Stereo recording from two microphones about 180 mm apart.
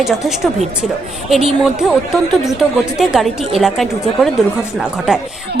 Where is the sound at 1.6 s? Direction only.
Centre (ahead or behind).